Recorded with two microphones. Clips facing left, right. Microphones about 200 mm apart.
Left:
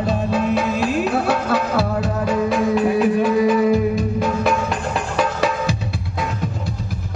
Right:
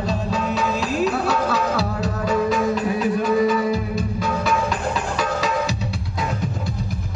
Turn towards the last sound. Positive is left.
turn(degrees=55)  # may be behind; listen again after turning